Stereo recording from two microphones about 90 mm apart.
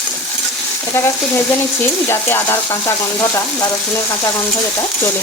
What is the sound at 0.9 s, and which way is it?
Stir, 25° left (ahead or behind).